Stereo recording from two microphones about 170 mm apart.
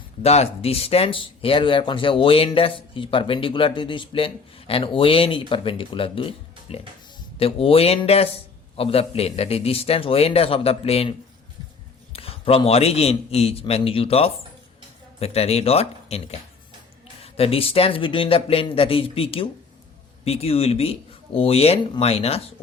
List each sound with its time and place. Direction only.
0.2 s speech: 40° left (ahead or behind)
12.1 s speech: 35° left (ahead or behind)